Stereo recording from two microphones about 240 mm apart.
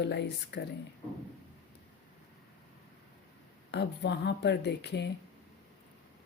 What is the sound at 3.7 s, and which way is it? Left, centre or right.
A woman's voice, left.